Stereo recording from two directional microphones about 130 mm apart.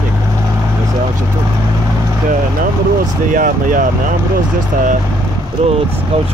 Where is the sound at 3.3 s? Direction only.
90° right.